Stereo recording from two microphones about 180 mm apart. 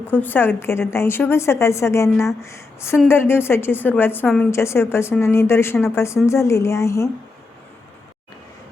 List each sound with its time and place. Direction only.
0.1 s a woman's voice: 10° left (ahead or behind)